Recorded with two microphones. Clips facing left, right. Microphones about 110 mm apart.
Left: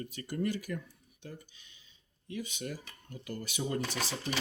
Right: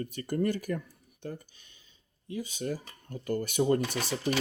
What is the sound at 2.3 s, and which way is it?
Speech, 35° right (ahead or behind).